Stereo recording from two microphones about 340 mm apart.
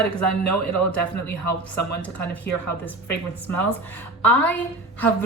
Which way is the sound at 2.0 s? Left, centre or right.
Centre.